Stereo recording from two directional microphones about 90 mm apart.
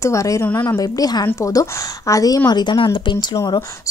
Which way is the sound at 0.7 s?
45° left (ahead or behind).